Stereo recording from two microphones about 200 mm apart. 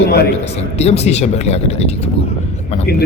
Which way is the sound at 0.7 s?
30° left (ahead or behind).